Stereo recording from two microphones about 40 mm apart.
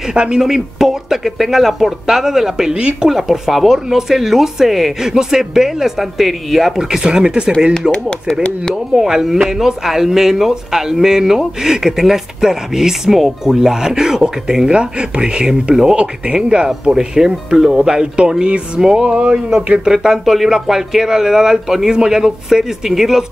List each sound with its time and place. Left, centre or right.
0.1 s speech: right
0.4 s speech: centre
6.8 s speech: centre
7.9 s speech: left
8.9 s speech: centre
19.8 s speech: centre